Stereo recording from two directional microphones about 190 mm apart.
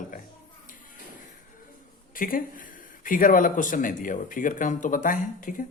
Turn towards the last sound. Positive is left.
turn(degrees=45)  # may be behind; listen again after turning